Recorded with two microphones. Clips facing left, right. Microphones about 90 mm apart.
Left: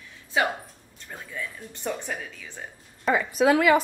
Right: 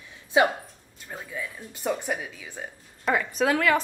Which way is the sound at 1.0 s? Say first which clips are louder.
Right 1 dB; 10° right (ahead or behind).